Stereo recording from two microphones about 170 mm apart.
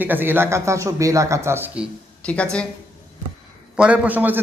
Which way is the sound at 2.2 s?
5° left (ahead or behind).